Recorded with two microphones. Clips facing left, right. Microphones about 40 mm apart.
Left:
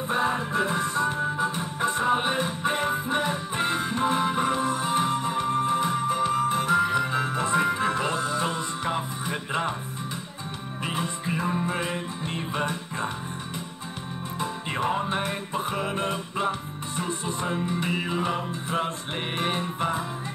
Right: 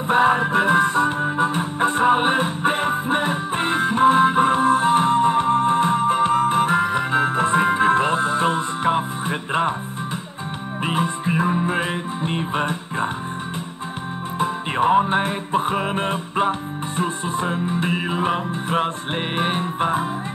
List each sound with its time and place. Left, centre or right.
0.1 s music: right
10.8 s music: right
14.4 s music: right